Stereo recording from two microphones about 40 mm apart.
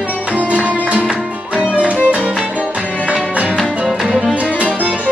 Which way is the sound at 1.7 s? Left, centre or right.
Left.